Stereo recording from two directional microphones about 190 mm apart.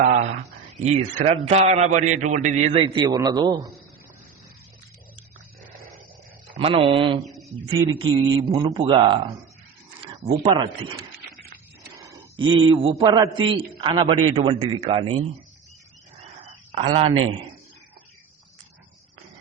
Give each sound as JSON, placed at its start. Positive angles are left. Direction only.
{"t": 0.0, "sound": "a man's voice", "side_deg": -40}
{"t": 6.5, "sound": "a man's voice", "side_deg": -30}
{"t": 10.5, "sound": "a man's voice", "side_deg": -25}
{"t": 12.0, "sound": "a man's voice", "side_deg": -20}
{"t": 16.7, "sound": "a man's voice", "side_deg": -30}